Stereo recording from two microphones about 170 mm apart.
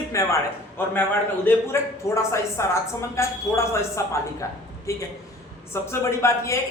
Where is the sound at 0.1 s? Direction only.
20° left (ahead or behind).